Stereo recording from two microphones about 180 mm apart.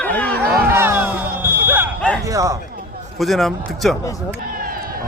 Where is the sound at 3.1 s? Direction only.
Centre (ahead or behind).